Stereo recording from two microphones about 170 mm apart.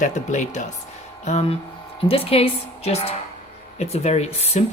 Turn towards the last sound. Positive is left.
turn(degrees=40)  # may be behind; listen again after turning